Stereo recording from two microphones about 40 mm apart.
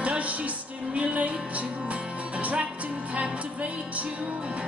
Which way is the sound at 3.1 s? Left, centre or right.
Right.